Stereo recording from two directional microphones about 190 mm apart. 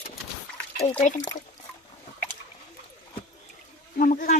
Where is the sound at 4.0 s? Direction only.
45° left (ahead or behind).